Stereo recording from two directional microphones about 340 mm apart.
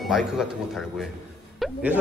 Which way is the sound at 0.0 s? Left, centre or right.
Centre.